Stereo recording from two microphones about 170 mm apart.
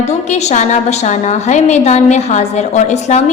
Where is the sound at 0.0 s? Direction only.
40° left (ahead or behind).